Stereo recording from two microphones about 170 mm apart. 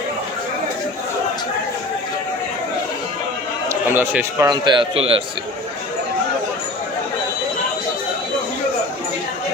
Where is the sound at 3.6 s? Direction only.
10° right (ahead or behind).